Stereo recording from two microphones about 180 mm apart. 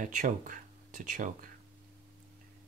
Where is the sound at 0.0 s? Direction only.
45° right (ahead or behind).